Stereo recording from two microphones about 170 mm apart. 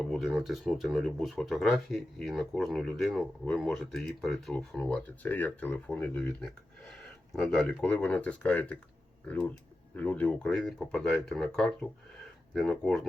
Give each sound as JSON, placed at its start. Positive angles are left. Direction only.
{"t": 0.0, "sound": "speech", "side_deg": 0}